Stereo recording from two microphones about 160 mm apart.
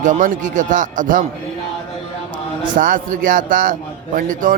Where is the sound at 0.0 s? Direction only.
55° right (ahead or behind).